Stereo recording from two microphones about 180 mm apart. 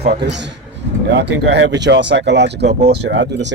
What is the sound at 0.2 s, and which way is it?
Speech, 75° right (ahead or behind).